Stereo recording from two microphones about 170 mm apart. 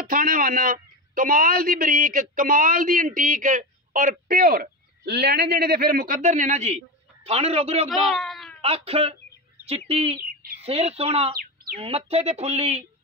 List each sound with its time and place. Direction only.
0.1 s a man's voice: 55° right (ahead or behind); by 7.9 s 35° right (ahead or behind)
7.9 s a sound: centre (ahead or behind)
8.5 s speech: 35° right (ahead or behind)